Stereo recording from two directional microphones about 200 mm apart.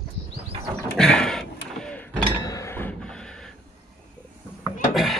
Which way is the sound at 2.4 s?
15° left (ahead or behind).